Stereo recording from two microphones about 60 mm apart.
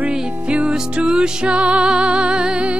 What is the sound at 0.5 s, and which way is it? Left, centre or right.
Music, centre.